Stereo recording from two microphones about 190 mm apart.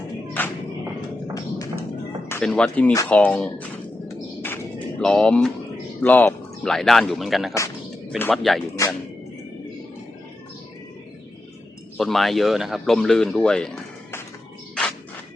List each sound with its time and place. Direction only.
0.4 s music: 10° left (ahead or behind)
2.3 s speech: 5° left (ahead or behind)
4.4 s music: 10° left (ahead or behind)
6.0 s speech: 10° left (ahead or behind)
11.9 s speech: centre (ahead or behind)